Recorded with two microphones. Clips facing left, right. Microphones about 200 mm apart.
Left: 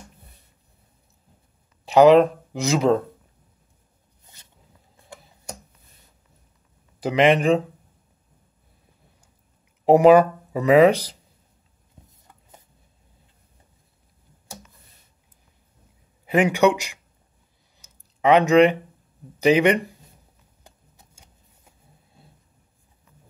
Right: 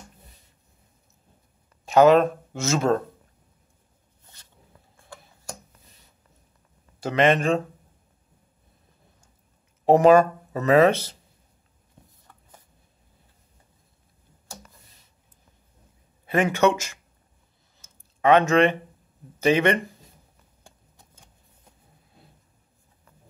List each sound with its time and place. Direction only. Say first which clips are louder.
2.0 s speech: left 3 dB; 15° left (ahead or behind)
4.9 s tick-tock: left 2 dB; 20° left (ahead or behind)
7.0 s speech: left 2 dB; 15° left (ahead or behind)
9.8 s speech: left 2 dB; 10° left (ahead or behind)
12.3 s chopping: left 2 dB; 20° left (ahead or behind)
16.3 s speech: left 3 dB; 15° left (ahead or behind)
17.7 s a sound: left 1 dB; 15° left (ahead or behind)
19.4 s speech: left 3 dB; 15° left (ahead or behind)